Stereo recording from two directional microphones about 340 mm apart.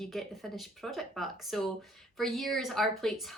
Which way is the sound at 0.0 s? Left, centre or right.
Centre.